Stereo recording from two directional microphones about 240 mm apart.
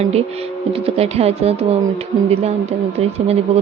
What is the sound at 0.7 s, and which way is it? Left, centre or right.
Speech, right.